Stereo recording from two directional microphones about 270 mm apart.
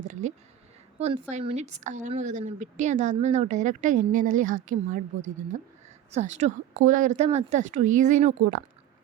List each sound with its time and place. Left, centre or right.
0.1 s a sound: right
0.9 s a woman's voice: right
6.1 s a woman's voice: right